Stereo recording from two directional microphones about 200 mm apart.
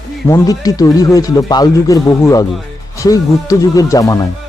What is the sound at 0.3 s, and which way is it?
Speech, 15° left (ahead or behind).